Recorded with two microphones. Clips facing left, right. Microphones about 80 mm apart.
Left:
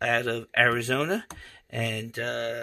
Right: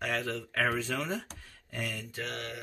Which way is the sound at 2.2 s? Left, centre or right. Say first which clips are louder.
Left 9 dB; left.